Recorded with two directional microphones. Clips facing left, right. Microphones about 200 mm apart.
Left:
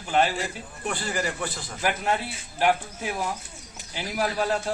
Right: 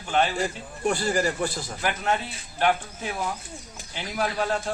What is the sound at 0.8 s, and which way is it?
Speech, 40° right (ahead or behind).